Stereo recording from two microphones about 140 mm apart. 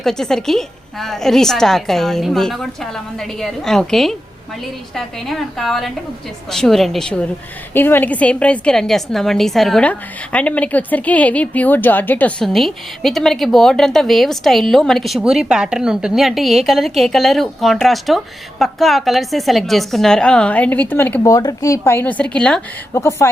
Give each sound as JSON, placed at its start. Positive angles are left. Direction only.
{"t": 0.0, "sound": "a woman's voice", "side_deg": 5}
{"t": 21.3, "sound": "speech", "side_deg": 25}
{"t": 23.0, "sound": "speech", "side_deg": 20}